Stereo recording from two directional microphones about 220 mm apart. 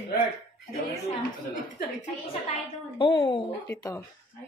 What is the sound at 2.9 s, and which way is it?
A woman's voice, 20° left (ahead or behind).